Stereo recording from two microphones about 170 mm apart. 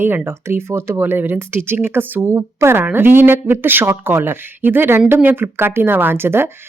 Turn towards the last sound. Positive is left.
turn(degrees=-15)  # may be behind; listen again after turning